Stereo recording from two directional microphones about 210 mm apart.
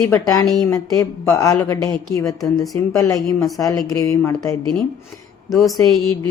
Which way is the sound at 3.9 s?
15° left (ahead or behind).